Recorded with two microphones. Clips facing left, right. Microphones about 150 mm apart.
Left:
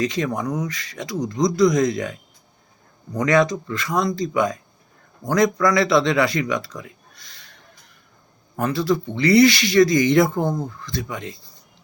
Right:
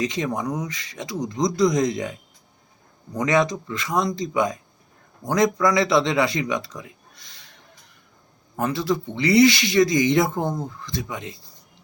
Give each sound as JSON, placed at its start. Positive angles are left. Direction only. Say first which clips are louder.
{"t": 0.0, "sound": "speech", "louder": "left 2 dB", "side_deg": -20}
{"t": 3.2, "sound": "speech", "louder": "left 3 dB", "side_deg": -20}
{"t": 8.6, "sound": "speech", "louder": "left 2 dB", "side_deg": -20}